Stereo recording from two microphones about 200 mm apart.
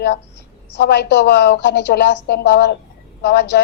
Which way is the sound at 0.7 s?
60° left (ahead or behind).